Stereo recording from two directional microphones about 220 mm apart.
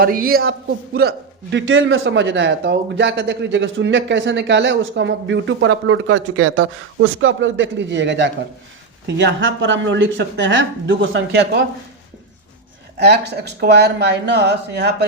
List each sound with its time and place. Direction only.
0.0 s a man's voice: 40° right (ahead or behind)
13.0 s speech: 50° right (ahead or behind)